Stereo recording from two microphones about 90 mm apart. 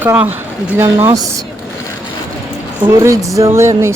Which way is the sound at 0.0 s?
20° right (ahead or behind).